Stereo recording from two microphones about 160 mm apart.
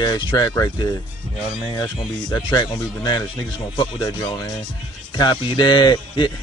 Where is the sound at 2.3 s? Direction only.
25° left (ahead or behind).